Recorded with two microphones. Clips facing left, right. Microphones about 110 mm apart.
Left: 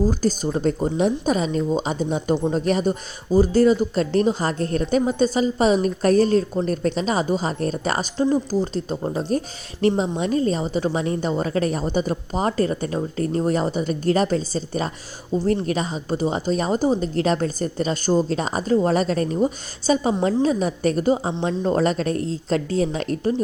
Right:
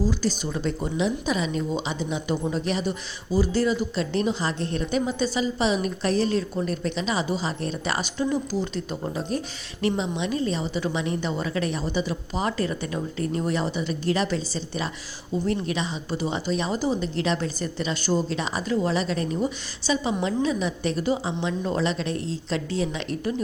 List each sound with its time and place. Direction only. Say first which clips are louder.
0.1 s a woman's voice: left 5 dB; 45° left (ahead or behind)